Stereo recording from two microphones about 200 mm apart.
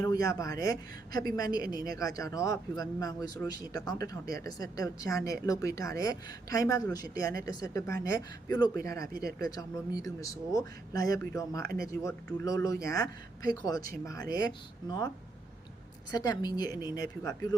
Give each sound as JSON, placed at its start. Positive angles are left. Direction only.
{"t": 0.0, "sound": "a woman's voice", "side_deg": 15}
{"t": 7.3, "sound": "a woman's voice", "side_deg": -50}
{"t": 7.7, "sound": "a woman's voice", "side_deg": 15}
{"t": 9.1, "sound": "a woman's voice", "side_deg": -50}
{"t": 9.6, "sound": "a woman's voice", "side_deg": 15}
{"t": 11.6, "sound": "a woman's voice", "side_deg": -50}
{"t": 11.9, "sound": "a woman's voice", "side_deg": 15}
{"t": 16.1, "sound": "speech", "side_deg": 20}